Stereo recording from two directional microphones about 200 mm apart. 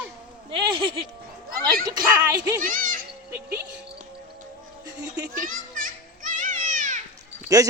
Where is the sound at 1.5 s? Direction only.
50° right (ahead or behind).